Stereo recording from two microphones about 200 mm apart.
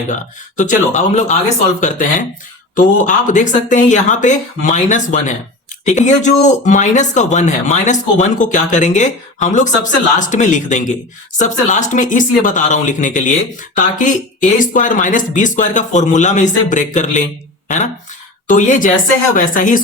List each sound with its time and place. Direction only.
0.1 s speech: 40° left (ahead or behind)
2.7 s speech: 40° left (ahead or behind)
18.4 s speech: 40° left (ahead or behind)